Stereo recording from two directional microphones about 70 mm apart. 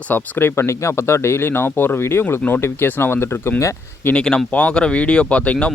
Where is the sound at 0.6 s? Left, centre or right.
Left.